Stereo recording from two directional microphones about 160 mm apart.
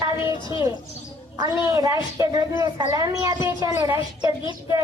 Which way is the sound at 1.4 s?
20° right (ahead or behind).